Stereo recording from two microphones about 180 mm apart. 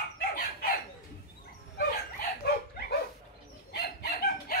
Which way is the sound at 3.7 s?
60° left (ahead or behind).